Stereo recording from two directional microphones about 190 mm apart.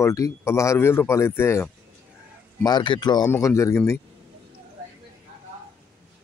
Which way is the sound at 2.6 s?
25° left (ahead or behind).